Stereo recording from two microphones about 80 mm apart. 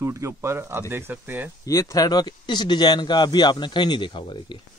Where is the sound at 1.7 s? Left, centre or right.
Left.